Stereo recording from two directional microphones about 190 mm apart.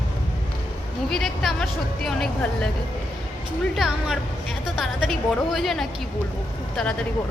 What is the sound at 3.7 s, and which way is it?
A woman's voice, centre (ahead or behind).